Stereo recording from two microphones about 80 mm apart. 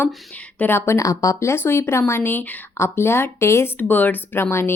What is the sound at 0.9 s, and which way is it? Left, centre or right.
A woman's voice, left.